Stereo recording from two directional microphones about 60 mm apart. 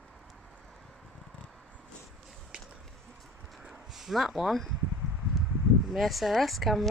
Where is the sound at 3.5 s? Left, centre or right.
Centre.